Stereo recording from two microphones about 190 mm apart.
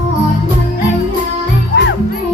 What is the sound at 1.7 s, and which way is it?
Music, 70° left (ahead or behind).